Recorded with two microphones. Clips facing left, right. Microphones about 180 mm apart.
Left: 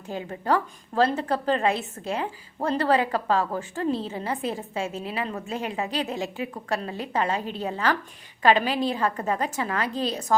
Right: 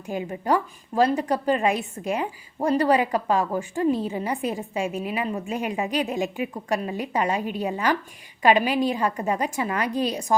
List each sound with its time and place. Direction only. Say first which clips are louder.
0.1 s a woman's voice: right 2 dB; 15° right (ahead or behind)